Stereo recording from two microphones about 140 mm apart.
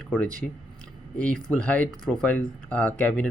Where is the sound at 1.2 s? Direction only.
10° left (ahead or behind).